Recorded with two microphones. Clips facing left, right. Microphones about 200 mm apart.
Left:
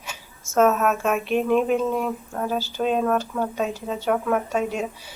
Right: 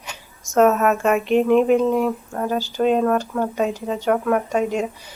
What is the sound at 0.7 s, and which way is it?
Speech, centre (ahead or behind).